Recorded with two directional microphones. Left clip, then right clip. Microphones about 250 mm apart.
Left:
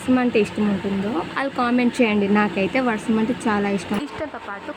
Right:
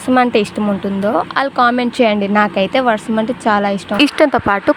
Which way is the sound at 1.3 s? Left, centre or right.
Right.